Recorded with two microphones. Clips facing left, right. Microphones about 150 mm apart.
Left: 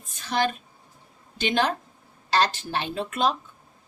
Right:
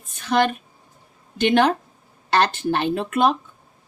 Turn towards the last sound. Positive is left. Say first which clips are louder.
# right 6 dB
turn(degrees=-55)  # may be behind; listen again after turning